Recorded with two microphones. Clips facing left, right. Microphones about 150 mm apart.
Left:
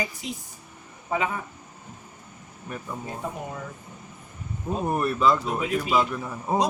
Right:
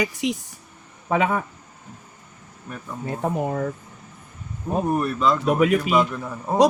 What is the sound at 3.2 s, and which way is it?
Speech, 65° right (ahead or behind).